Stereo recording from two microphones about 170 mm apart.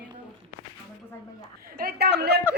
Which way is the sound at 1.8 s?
70° right (ahead or behind).